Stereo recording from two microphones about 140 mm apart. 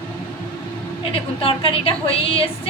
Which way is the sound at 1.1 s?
40° left (ahead or behind).